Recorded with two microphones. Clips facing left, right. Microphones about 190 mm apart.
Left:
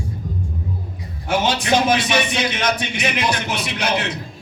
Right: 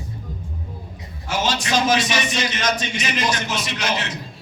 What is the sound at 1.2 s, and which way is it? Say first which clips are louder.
A man's voice: left 4 dB; 60° left (ahead or behind).